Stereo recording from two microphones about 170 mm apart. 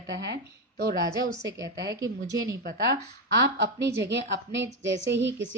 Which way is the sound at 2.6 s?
65° right (ahead or behind).